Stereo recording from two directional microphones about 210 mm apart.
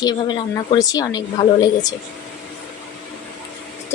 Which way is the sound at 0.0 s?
20° left (ahead or behind).